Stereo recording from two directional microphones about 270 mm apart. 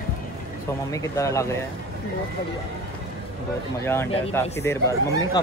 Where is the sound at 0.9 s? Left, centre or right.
Centre.